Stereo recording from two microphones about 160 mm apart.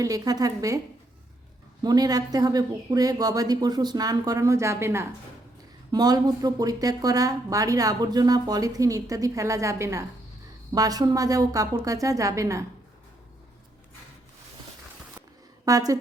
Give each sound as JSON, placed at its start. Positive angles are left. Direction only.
{"t": 0.0, "sound": "speech", "side_deg": -20}
{"t": 1.8, "sound": "speech", "side_deg": -25}
{"t": 15.6, "sound": "speech", "side_deg": -20}